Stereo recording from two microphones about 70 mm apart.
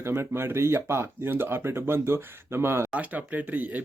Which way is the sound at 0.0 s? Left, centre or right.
Right.